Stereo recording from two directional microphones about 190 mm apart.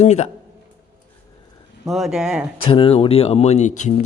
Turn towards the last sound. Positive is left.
turn(degrees=40)  # may be behind; listen again after turning